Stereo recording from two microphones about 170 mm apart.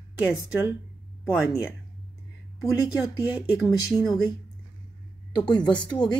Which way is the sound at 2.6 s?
20° left (ahead or behind).